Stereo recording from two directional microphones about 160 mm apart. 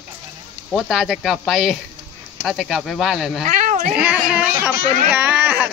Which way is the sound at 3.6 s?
50° right (ahead or behind).